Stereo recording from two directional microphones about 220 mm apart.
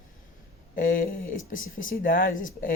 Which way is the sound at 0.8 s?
40° left (ahead or behind).